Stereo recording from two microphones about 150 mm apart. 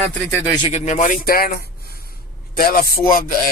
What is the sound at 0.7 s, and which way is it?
Speech, 50° left (ahead or behind).